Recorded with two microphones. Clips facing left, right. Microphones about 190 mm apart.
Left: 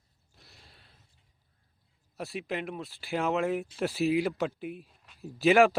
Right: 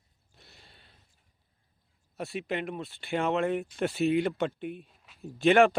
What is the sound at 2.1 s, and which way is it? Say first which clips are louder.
Speech: right 2 dB; centre (ahead or behind).